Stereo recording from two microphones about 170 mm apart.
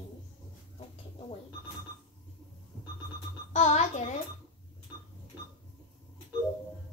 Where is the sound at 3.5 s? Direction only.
40° left (ahead or behind).